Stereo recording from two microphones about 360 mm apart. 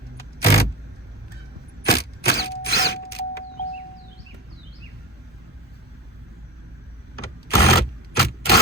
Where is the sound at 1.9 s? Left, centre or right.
Left.